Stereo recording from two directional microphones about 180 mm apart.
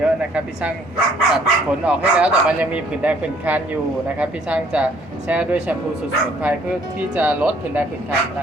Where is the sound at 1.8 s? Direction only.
5° right (ahead or behind).